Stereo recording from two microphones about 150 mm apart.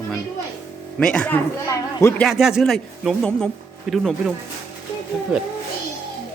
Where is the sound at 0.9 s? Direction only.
5° left (ahead or behind).